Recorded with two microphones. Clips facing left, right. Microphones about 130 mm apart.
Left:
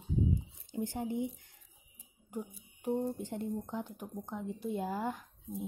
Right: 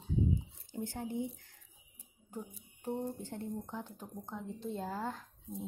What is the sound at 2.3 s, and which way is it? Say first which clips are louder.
Speech: left 3 dB; 15° left (ahead or behind).